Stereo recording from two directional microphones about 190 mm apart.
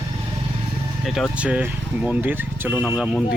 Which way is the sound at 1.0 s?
Centre (ahead or behind).